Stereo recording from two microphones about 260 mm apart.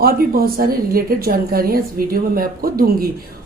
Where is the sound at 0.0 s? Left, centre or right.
Right.